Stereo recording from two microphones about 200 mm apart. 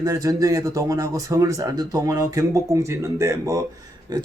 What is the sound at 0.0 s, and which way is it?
Speech, 15° right (ahead or behind).